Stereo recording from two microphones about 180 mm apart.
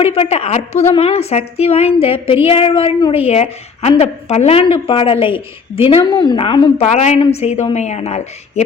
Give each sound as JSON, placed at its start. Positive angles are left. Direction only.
{"t": 0.0, "sound": "a woman's voice", "side_deg": 30}